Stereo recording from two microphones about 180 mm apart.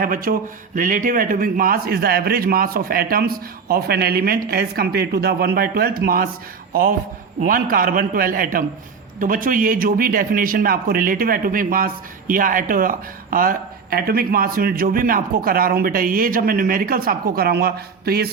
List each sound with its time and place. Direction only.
0.0 s a man's voice: 50° right (ahead or behind)
7.4 s speech: 50° right (ahead or behind)